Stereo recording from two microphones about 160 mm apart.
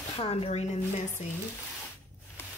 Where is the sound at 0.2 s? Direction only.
40° left (ahead or behind).